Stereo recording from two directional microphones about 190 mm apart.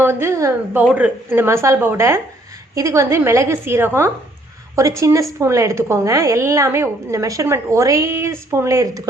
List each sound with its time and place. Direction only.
0.0 s a woman's voice: 15° right (ahead or behind)